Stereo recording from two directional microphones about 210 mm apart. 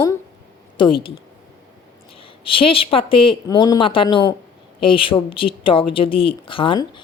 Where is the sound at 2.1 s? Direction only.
25° left (ahead or behind).